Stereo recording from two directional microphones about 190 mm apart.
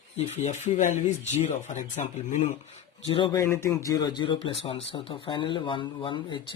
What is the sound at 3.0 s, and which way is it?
Speech, 25° left (ahead or behind).